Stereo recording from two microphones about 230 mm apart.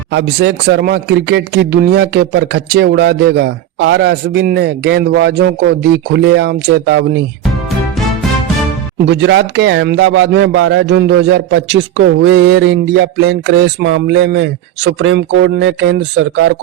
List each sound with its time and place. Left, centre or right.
0.1 s a man's voice: right
9.0 s a man's voice: right